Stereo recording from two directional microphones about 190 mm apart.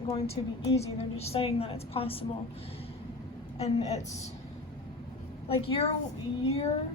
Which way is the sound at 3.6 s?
35° left (ahead or behind).